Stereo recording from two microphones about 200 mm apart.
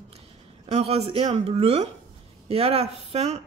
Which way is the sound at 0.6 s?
30° right (ahead or behind).